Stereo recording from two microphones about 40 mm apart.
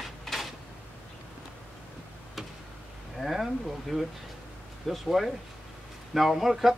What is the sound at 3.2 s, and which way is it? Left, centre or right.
Speech, centre.